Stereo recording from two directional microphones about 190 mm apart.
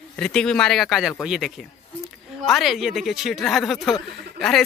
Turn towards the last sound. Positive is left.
turn(degrees=0)  # may be behind; listen again after turning